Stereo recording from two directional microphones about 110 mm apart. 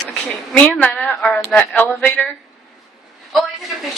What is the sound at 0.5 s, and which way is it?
A woman's voice, 15° left (ahead or behind).